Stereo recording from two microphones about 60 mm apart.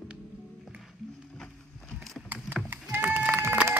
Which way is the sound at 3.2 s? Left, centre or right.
Right.